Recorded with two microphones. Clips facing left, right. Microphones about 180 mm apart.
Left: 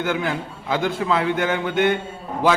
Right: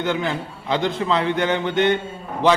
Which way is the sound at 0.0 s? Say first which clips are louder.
Even; 5° left (ahead or behind).